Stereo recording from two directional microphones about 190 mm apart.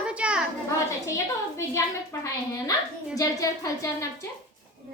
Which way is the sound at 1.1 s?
15° left (ahead or behind).